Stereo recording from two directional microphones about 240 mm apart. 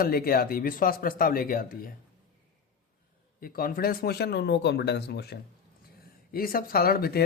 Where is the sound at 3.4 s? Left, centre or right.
Left.